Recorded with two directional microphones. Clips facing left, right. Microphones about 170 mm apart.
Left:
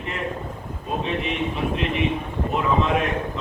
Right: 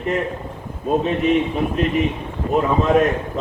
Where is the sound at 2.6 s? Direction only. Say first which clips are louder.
Right 6 dB; 40° right (ahead or behind).